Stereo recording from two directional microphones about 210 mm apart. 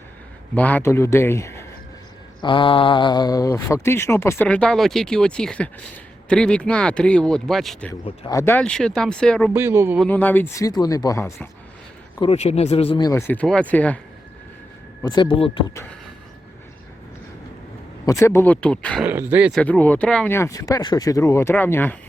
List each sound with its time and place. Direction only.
0.5 s speech: 5° left (ahead or behind)
2.4 s speech: 25° left (ahead or behind); by 7.9 s 5° left (ahead or behind)
8.0 s speech: 20° left (ahead or behind); by 9.5 s 5° left (ahead or behind)
9.5 s speech: 10° right (ahead or behind)
10.0 s speech: 10° left (ahead or behind)
12.2 s speech: 30° left (ahead or behind); by 14.0 s 5° left (ahead or behind)
15.0 s speech: 20° left (ahead or behind)
18.0 s speech: 15° left (ahead or behind)
19.0 s speech: 10° right (ahead or behind); by 21.9 s 10° left (ahead or behind)